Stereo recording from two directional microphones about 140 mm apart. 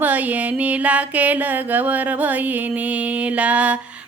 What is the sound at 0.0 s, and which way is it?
Mantra, 10° right (ahead or behind).